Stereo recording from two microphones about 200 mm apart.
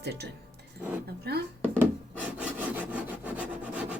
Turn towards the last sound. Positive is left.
turn(degrees=-5)  # may be behind; listen again after turning